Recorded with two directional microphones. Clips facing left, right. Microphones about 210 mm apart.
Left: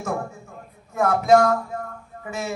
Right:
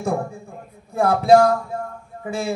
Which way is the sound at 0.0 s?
30° right (ahead or behind).